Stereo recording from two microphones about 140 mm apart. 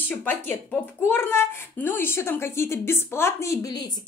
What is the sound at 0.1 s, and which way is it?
Speech, 15° left (ahead or behind).